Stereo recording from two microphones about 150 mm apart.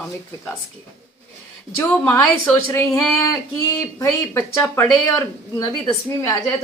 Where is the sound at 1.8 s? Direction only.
10° left (ahead or behind).